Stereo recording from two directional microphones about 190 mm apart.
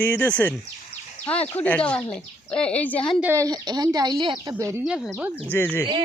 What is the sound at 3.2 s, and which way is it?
A woman's voice, 10° right (ahead or behind).